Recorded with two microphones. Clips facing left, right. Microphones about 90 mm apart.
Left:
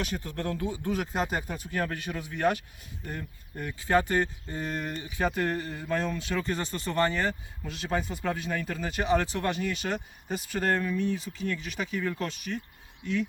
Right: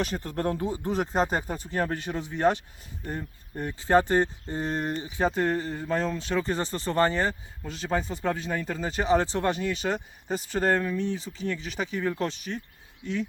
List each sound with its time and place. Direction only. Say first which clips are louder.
0.0 s speech: right 4 dB; 40° right (ahead or behind)